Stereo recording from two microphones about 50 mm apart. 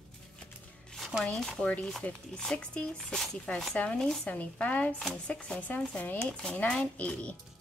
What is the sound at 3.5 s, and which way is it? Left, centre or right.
Speech, left.